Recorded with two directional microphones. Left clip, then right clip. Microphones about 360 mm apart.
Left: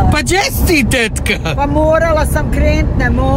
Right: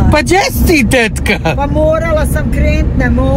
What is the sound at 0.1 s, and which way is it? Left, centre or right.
Speech, centre.